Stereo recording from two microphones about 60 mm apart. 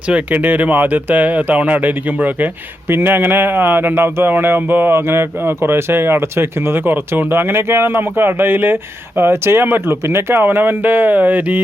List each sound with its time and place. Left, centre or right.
0.1 s speech: right